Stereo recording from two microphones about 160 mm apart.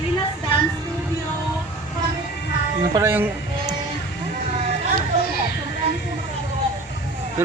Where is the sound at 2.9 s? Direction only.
15° right (ahead or behind).